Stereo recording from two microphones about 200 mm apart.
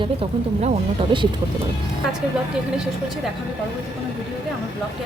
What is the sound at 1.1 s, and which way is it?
Speech, 25° right (ahead or behind).